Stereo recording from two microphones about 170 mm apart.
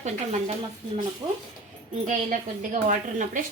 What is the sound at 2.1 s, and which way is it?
A woman's voice, 50° right (ahead or behind).